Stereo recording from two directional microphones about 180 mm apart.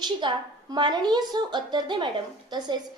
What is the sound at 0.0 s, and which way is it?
A woman's voice, 25° right (ahead or behind).